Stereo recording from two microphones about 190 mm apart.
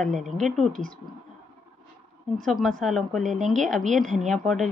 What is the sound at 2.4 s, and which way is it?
A woman's voice, centre (ahead or behind).